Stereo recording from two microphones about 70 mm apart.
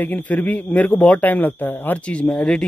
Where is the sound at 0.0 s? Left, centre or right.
Left.